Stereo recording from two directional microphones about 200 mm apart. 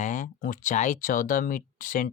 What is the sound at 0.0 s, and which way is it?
Speech, 40° left (ahead or behind).